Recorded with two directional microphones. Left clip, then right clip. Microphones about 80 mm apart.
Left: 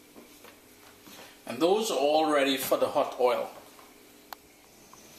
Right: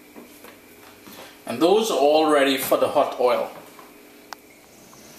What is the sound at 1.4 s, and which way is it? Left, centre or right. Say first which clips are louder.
Speech: right 7 dB; left.